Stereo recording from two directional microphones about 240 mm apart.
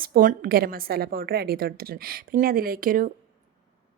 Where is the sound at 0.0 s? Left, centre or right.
Right.